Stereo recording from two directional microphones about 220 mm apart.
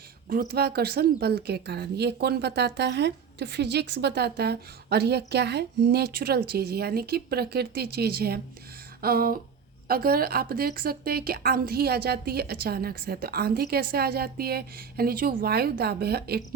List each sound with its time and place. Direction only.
0.3 s speech: 40° right (ahead or behind)
9.0 s a sound: 40° right (ahead or behind)
9.9 s speech: 45° right (ahead or behind)